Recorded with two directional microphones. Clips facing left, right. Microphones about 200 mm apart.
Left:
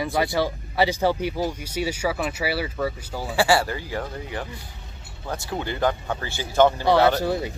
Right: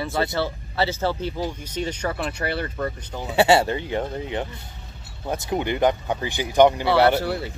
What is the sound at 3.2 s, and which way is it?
A man's voice, 20° right (ahead or behind).